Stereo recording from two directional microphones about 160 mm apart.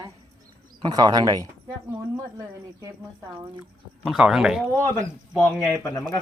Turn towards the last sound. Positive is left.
turn(degrees=20)  # may be behind; listen again after turning